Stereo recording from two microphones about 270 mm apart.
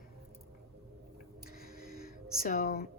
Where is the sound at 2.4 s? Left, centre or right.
Left.